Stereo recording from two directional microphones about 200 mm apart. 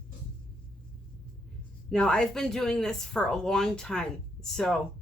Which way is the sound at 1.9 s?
5° left (ahead or behind).